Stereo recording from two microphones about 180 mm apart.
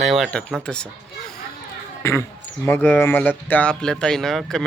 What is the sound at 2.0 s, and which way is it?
Speech, 15° left (ahead or behind).